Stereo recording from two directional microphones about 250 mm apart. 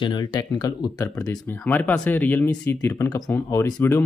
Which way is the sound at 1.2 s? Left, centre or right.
Centre.